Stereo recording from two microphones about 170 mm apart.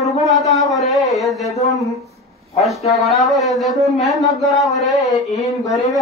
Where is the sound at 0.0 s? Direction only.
Centre (ahead or behind).